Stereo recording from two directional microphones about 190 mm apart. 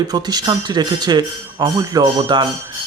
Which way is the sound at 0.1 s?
20° right (ahead or behind).